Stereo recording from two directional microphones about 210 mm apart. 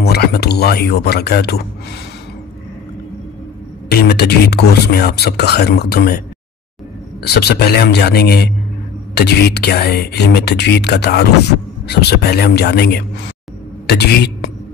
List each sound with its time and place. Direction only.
0.0 s speech: 50° left (ahead or behind)
3.9 s speech: 50° left (ahead or behind)
7.2 s speech: 50° left (ahead or behind)